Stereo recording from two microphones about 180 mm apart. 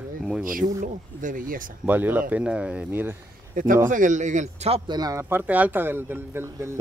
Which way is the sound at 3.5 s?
50° right (ahead or behind).